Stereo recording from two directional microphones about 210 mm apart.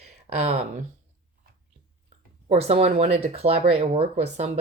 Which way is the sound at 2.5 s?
30° right (ahead or behind).